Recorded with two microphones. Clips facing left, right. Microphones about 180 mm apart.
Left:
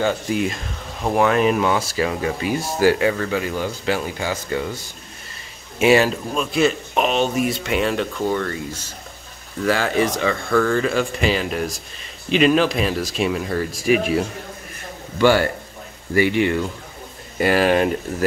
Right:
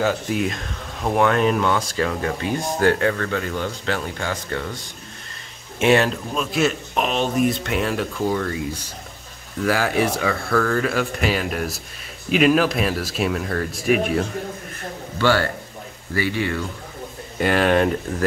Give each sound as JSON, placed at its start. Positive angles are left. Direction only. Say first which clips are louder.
{"t": 0.0, "sound": "speech", "louder": "left 1 dB", "side_deg": 0}
{"t": 15.1, "sound": "speech", "louder": "left 4 dB", "side_deg": 15}
{"t": 17.4, "sound": "speech", "louder": "left 1 dB", "side_deg": 5}